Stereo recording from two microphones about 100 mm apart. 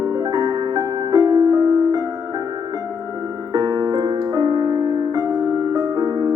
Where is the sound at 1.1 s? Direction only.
40° right (ahead or behind).